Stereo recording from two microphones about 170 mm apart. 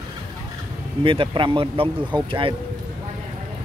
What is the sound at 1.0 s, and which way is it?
Speech, 30° right (ahead or behind).